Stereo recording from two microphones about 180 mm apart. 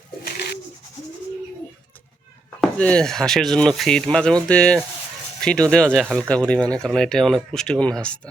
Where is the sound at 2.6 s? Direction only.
5° left (ahead or behind).